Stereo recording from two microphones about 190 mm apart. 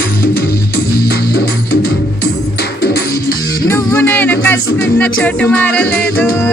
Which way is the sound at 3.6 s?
15° left (ahead or behind).